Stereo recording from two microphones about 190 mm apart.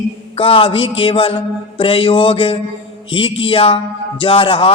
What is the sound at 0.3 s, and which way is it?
A man's voice, 30° left (ahead or behind).